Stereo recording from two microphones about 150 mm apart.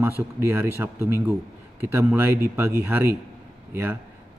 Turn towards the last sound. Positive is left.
turn(degrees=-15)  # may be behind; listen again after turning